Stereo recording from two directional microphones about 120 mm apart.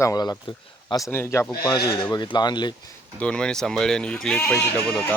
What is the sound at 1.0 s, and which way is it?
Speech, 20° left (ahead or behind).